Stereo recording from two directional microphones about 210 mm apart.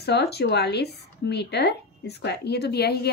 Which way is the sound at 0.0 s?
50° left (ahead or behind).